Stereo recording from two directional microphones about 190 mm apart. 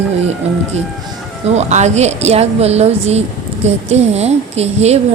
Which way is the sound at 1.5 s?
35° right (ahead or behind).